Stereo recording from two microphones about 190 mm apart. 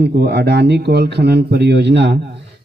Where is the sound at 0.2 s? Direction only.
60° right (ahead or behind).